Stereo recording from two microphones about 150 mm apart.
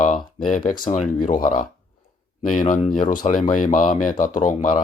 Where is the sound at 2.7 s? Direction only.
55° left (ahead or behind).